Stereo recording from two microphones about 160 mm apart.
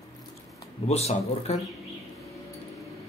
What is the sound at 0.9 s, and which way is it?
Speech, 40° left (ahead or behind).